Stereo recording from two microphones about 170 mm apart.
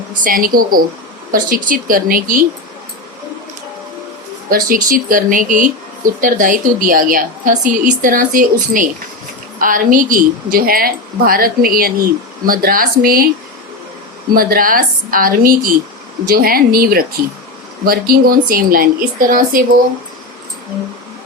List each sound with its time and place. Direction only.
0.3 s a woman's voice: 55° right (ahead or behind)
4.4 s a woman's voice: 55° right (ahead or behind)
14.3 s a woman's voice: 60° right (ahead or behind)